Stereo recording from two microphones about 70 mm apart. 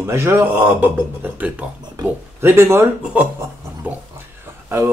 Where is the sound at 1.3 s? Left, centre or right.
Centre.